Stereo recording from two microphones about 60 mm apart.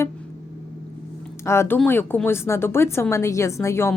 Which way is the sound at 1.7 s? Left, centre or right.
Left.